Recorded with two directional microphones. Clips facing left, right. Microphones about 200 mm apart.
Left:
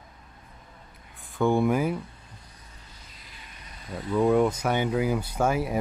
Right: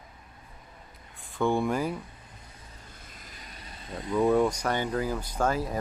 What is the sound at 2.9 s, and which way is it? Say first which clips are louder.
Vehicle: right 2 dB; 50° right (ahead or behind).